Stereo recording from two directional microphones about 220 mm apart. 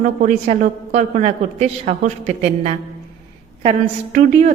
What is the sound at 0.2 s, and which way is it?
A woman's voice, 35° right (ahead or behind).